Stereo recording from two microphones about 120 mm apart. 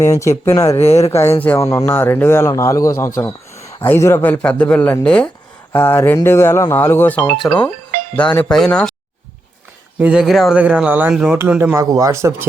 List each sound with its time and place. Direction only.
0.0 s a man's voice: 25° left (ahead or behind)
0.8 s speech: 60° left (ahead or behind)
1.1 s a man's voice: 20° left (ahead or behind)
1.5 s a man's voice: 30° left (ahead or behind)
1.9 s a man's voice: 15° left (ahead or behind)
7.3 s speech: 5° left (ahead or behind)
10.0 s speech: 5° right (ahead or behind)
10.6 s speech: 10° right (ahead or behind)
11.8 s speech: 30° right (ahead or behind)